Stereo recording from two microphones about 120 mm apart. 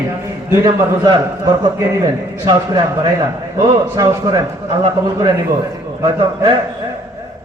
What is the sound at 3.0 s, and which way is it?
A man's voice, 40° right (ahead or behind).